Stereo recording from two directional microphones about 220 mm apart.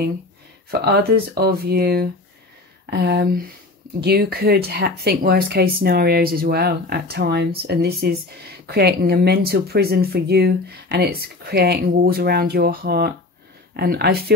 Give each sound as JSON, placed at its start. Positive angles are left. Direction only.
{"t": 0.7, "sound": "speech", "side_deg": -45}